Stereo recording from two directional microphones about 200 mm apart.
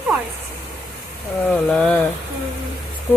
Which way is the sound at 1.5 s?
5° left (ahead or behind).